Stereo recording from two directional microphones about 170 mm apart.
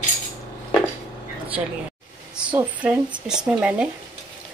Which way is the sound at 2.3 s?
5° right (ahead or behind).